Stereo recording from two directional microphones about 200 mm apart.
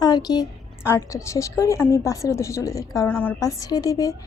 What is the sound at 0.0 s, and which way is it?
A woman's voice, 20° left (ahead or behind).